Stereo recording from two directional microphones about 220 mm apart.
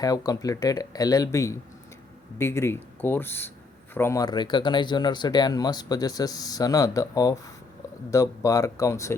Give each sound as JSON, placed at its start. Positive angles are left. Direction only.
{"t": 0.0, "sound": "speech", "side_deg": 15}